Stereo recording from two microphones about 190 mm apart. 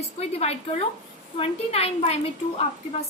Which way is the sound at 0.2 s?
35° left (ahead or behind).